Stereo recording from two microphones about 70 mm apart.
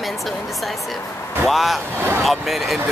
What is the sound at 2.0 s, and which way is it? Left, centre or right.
Speech, right.